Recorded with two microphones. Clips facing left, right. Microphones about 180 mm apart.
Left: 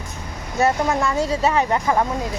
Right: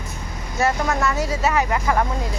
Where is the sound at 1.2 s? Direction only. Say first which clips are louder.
Left 2 dB; 30° left (ahead or behind).